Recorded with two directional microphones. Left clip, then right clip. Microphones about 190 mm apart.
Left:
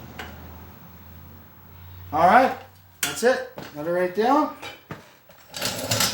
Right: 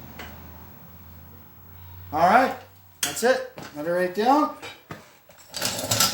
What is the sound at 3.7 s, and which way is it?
Speech, 25° right (ahead or behind).